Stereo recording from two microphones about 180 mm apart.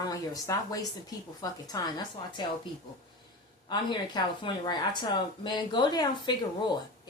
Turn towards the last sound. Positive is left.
turn(degrees=25)  # may be behind; listen again after turning